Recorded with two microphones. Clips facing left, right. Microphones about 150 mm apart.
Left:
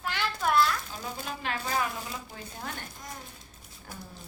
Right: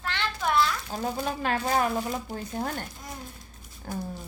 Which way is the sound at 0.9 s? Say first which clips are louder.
Right 8 dB; 45° right (ahead or behind).